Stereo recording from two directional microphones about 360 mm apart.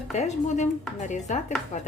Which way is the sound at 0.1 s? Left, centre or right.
Centre.